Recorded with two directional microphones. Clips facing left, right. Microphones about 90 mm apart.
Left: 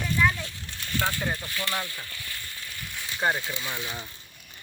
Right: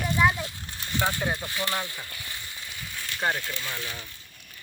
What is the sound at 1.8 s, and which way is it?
Frying, 20° right (ahead or behind).